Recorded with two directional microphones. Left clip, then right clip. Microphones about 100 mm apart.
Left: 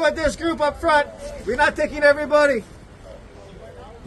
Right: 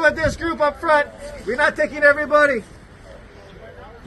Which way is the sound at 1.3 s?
20° left (ahead or behind).